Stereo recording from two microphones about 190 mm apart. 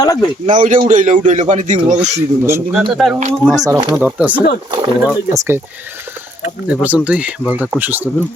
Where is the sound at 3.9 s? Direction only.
5° right (ahead or behind).